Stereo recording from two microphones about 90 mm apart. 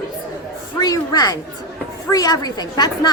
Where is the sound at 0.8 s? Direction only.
45° left (ahead or behind).